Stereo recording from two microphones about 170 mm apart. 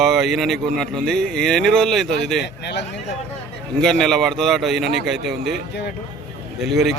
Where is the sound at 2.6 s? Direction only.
90° left.